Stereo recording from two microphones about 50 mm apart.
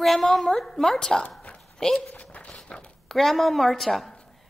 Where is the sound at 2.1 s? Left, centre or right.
Left.